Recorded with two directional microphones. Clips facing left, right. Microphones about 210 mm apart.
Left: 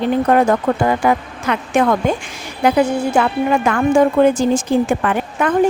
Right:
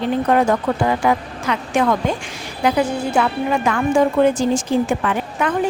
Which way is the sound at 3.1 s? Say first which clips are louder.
Left 3 dB; 50° left (ahead or behind).